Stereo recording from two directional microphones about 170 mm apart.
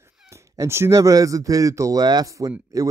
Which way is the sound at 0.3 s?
15° right (ahead or behind).